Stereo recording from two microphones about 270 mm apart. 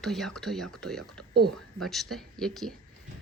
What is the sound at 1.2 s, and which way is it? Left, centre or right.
Speech, right.